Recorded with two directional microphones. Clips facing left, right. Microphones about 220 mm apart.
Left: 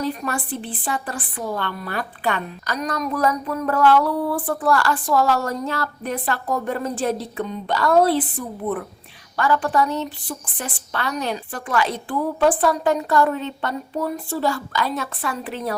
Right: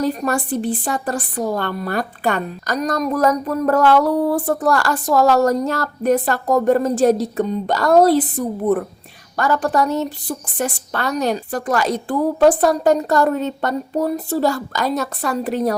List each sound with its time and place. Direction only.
0.0 s a woman's voice: 40° right (ahead or behind)